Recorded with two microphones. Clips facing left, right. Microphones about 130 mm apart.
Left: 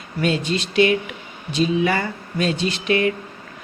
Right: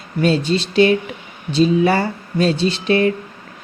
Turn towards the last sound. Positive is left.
turn(degrees=-35)  # may be behind; listen again after turning